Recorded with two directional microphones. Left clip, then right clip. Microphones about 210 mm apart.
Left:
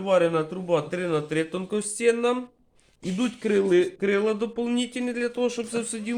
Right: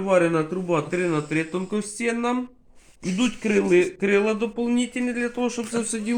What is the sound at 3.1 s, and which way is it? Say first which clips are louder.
A man's voice: right 1 dB; 25° left (ahead or behind).